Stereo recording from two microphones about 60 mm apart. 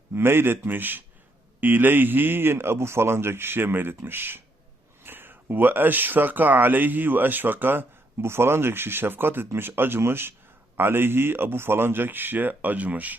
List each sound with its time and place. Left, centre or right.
0.1 s speech: right